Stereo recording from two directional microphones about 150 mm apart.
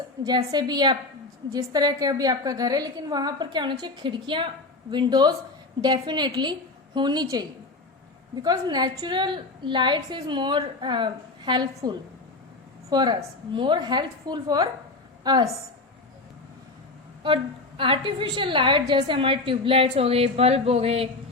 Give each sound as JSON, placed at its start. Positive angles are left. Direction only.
{"t": 0.3, "sound": "a woman's voice", "side_deg": -25}
{"t": 17.2, "sound": "a woman's voice", "side_deg": -35}